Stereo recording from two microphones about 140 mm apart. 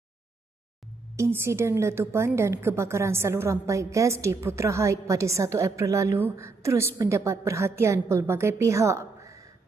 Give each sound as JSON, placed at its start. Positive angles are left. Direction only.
{"t": 1.1, "sound": "a woman's voice", "side_deg": -20}